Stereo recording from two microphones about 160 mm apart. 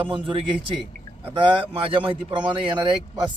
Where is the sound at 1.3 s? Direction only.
30° right (ahead or behind).